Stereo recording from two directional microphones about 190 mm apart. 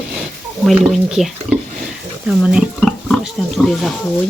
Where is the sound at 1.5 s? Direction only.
40° right (ahead or behind).